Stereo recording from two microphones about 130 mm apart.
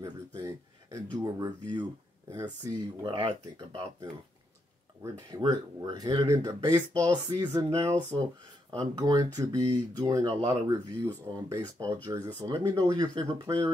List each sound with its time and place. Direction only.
0.0 s a sound: 25° right (ahead or behind)
1.1 s speech: 30° right (ahead or behind)
3.0 s speech: 35° right (ahead or behind)
5.4 s speech: 35° right (ahead or behind)
6.2 s speech: 25° right (ahead or behind)